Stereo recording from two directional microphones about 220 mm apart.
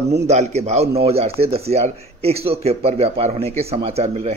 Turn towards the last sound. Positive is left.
turn(degrees=-30)  # may be behind; listen again after turning